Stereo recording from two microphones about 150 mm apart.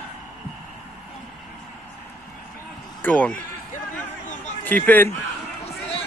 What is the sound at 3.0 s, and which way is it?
Speech, 10° left (ahead or behind).